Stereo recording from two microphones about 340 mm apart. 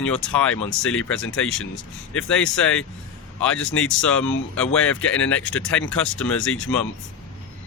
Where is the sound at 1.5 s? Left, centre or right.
Left.